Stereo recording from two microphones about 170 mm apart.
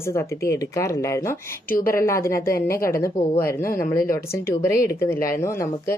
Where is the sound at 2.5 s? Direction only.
60° left (ahead or behind).